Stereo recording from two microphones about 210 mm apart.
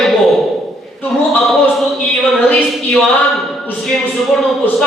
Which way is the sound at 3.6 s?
Centre (ahead or behind).